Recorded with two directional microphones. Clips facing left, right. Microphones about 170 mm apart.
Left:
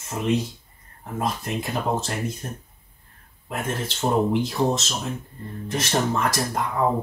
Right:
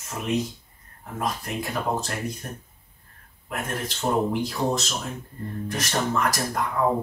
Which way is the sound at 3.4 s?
25° left (ahead or behind).